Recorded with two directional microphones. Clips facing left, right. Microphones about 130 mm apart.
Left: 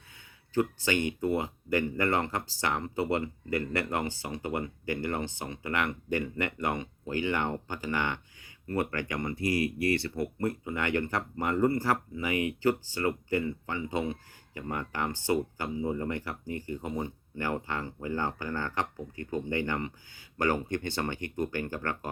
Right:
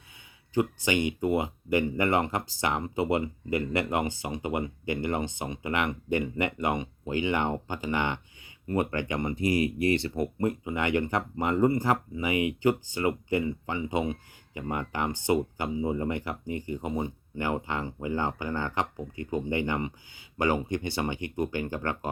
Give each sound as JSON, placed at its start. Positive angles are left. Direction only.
{"t": 0.5, "sound": "speech", "side_deg": -15}